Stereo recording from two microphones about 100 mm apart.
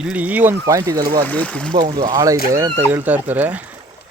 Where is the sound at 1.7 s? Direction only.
50° right (ahead or behind); by 3.6 s 15° right (ahead or behind).